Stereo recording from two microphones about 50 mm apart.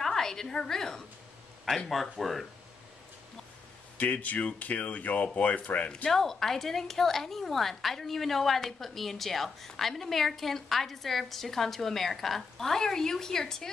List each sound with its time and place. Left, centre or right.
0.0 s a woman's voice: centre
4.0 s speech: left
6.0 s a woman's voice: centre